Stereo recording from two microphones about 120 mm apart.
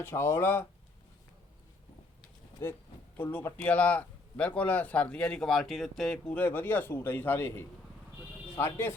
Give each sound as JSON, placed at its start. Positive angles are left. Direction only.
{"t": 0.0, "sound": "speech", "side_deg": 20}
{"t": 3.2, "sound": "speech", "side_deg": 20}
{"t": 6.3, "sound": "speech", "side_deg": 15}